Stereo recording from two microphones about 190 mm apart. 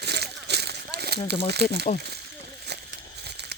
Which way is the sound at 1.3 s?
60° right (ahead or behind).